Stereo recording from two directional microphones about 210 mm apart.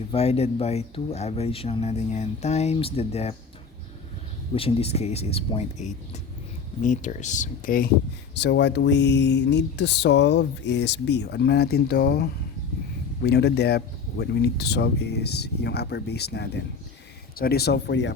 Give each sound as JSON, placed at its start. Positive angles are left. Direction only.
{"t": 0.1, "sound": "speech", "side_deg": 30}
{"t": 4.5, "sound": "speech", "side_deg": 25}
{"t": 8.4, "sound": "speech", "side_deg": 55}